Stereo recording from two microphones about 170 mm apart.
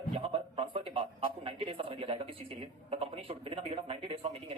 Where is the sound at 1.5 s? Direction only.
35° right (ahead or behind).